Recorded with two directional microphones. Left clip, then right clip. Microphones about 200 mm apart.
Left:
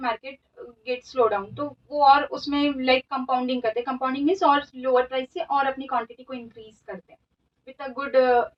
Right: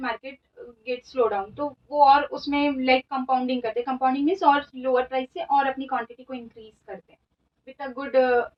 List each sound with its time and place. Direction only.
1.1 s speech: 15° left (ahead or behind)
7.6 s speech: 20° left (ahead or behind)